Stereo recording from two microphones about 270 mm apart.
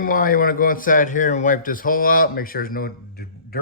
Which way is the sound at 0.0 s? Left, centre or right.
Left.